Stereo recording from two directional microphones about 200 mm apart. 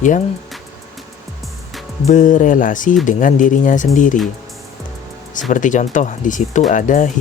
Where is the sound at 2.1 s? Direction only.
40° left (ahead or behind).